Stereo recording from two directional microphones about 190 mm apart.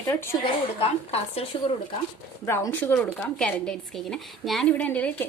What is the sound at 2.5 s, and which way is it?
Speech, 10° left (ahead or behind).